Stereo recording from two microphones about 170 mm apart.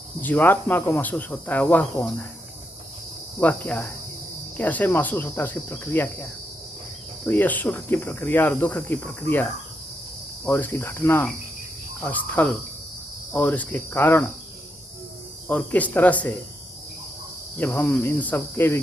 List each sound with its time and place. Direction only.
0.2 s speech: 10° left (ahead or behind)
3.4 s speech: 10° left (ahead or behind)
7.3 s speech: 10° left (ahead or behind)
15.4 s speech: 10° left (ahead or behind)
17.6 s speech: 10° left (ahead or behind)